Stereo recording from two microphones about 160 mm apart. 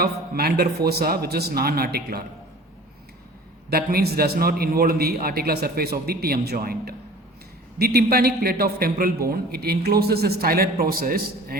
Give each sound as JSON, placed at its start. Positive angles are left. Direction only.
{"t": 0.0, "sound": "a man's voice", "side_deg": -75}
{"t": 3.7, "sound": "a man's voice", "side_deg": -70}